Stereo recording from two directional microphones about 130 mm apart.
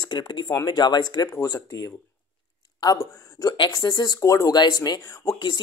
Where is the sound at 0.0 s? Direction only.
35° left (ahead or behind).